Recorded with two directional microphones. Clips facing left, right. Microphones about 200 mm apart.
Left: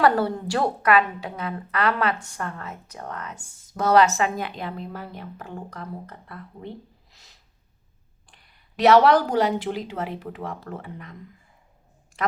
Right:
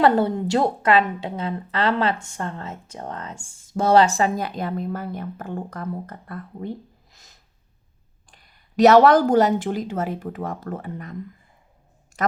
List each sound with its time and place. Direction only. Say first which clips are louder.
0.0 s a woman's voice: right 3 dB; 20° right (ahead or behind); by 6.7 s 50° right (ahead or behind)
7.1 s snort: right 2 dB; 45° right (ahead or behind)
8.3 s a woman's voice: right 3 dB; 40° right (ahead or behind)
12.1 s a sound: right 3 dB; 45° right (ahead or behind)